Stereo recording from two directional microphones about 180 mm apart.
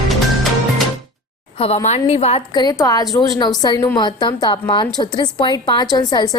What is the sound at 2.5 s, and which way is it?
A woman's voice, 25° left (ahead or behind).